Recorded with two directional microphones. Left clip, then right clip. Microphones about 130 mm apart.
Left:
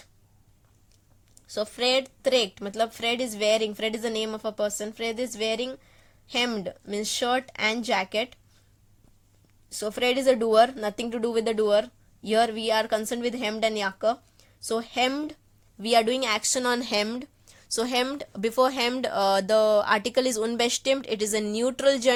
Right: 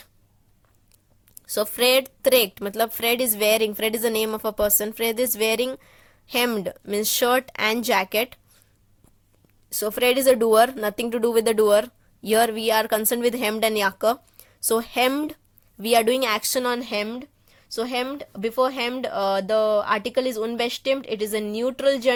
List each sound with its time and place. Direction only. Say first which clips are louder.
1.4 s speech: right 6 dB; 50° right (ahead or behind)
9.6 s speech: right 5 dB; 40° right (ahead or behind)
16.6 s speech: even; 10° right (ahead or behind)